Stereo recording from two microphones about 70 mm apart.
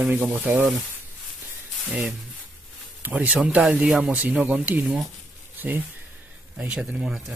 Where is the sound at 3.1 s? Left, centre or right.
Centre.